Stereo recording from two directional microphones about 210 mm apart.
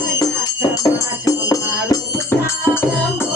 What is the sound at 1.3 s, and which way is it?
Music, 15° left (ahead or behind).